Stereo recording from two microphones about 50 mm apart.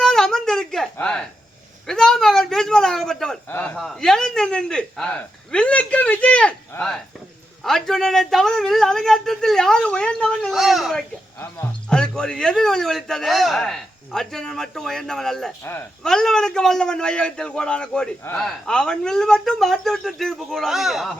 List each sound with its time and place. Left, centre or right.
0.0 s a sound: centre
1.9 s speech: centre
3.5 s a man's voice: left
3.8 s speech: centre
5.5 s speech: left
7.6 s speech: centre
10.5 s a woman's voice: centre
11.9 s speech: centre
15.6 s speech: left
16.0 s speech: centre